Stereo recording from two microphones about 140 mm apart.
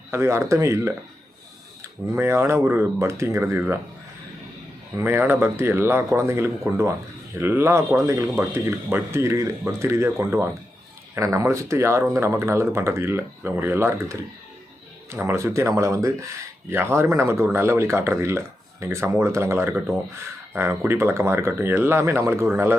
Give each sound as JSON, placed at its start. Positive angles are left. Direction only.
{"t": 0.1, "sound": "speech", "side_deg": -20}
{"t": 2.1, "sound": "speech", "side_deg": -15}
{"t": 5.0, "sound": "speech", "side_deg": -15}